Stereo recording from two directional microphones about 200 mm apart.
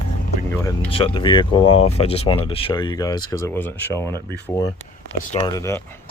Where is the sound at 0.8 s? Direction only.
25° left (ahead or behind).